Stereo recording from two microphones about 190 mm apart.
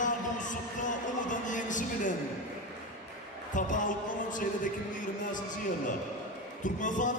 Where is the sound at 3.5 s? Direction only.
40° left (ahead or behind).